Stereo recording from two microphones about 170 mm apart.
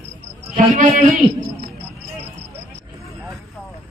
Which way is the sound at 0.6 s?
50° right (ahead or behind).